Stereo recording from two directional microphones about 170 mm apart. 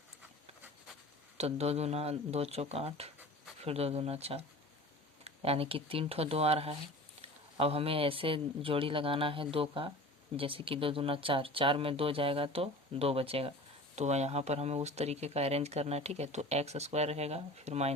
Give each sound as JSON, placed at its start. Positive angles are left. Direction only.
{"t": 1.4, "sound": "speech", "side_deg": -40}